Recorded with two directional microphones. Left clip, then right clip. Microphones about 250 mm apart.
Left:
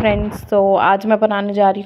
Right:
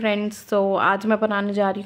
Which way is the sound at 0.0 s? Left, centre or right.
Centre.